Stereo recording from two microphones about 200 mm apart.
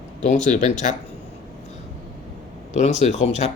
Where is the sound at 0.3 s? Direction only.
35° left (ahead or behind).